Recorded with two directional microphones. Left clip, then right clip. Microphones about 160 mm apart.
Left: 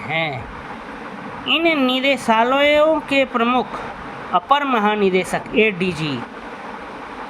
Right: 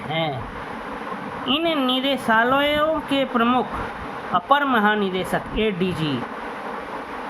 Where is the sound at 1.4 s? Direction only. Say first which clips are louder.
Left 5 dB; 35° left (ahead or behind).